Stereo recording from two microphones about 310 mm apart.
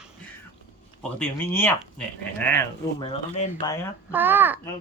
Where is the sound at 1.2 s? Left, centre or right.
Centre.